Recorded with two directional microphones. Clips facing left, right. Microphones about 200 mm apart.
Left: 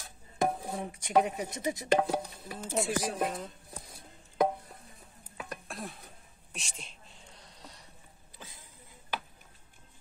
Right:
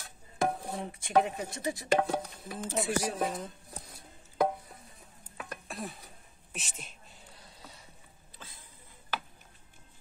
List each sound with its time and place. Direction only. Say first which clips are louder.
0.5 s chopping: even; centre (ahead or behind)
1.0 s speech: even; 15° left (ahead or behind)
2.0 s speech: even; 10° left (ahead or behind)
5.4 s a sound: right 1 dB; centre (ahead or behind)